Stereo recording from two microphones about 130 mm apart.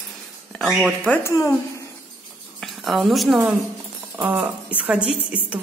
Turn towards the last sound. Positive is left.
turn(degrees=-10)  # may be behind; listen again after turning